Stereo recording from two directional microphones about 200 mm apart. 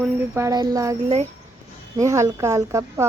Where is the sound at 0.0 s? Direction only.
10° right (ahead or behind).